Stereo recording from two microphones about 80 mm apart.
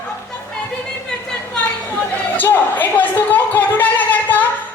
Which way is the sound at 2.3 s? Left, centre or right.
Left.